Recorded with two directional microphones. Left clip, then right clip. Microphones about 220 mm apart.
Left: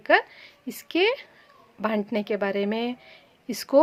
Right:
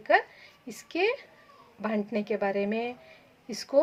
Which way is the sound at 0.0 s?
20° left (ahead or behind).